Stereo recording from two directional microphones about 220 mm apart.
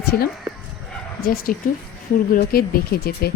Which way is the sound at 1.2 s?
45° left (ahead or behind).